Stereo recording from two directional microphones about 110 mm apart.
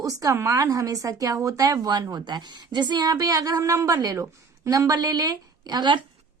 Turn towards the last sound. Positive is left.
turn(degrees=-40)  # may be behind; listen again after turning